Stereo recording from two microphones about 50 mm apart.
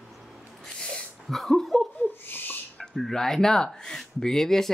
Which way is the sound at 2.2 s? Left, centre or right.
Left.